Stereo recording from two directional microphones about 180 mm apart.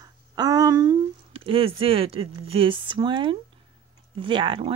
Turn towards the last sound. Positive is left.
turn(degrees=-30)  # may be behind; listen again after turning